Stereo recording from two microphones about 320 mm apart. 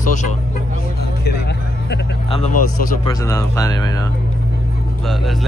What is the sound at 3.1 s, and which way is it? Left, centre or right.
Speech, centre.